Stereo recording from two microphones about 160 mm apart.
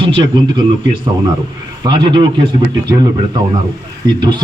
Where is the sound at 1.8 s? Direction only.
30° right (ahead or behind).